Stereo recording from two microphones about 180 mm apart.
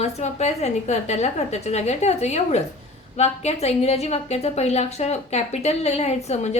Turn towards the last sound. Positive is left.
turn(degrees=40)  # may be behind; listen again after turning